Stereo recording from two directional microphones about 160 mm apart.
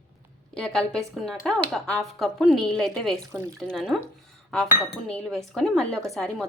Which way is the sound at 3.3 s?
20° right (ahead or behind).